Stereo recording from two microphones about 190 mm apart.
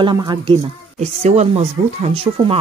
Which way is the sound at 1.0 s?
35° right (ahead or behind).